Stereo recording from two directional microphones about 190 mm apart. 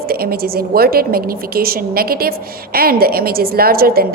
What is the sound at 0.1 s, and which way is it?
A woman's voice, 55° right (ahead or behind).